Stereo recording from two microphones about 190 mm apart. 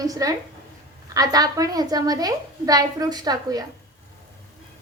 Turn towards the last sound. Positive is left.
turn(degrees=-20)  # may be behind; listen again after turning